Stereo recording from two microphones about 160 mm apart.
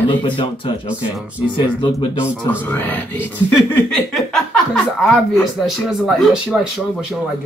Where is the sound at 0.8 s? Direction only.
10° right (ahead or behind).